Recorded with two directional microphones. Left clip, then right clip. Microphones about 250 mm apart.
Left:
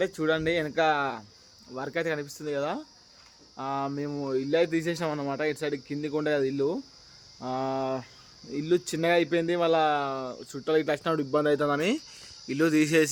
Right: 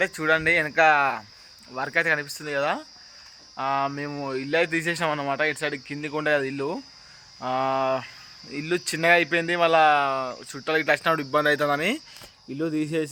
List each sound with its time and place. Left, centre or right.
0.0 s speech: centre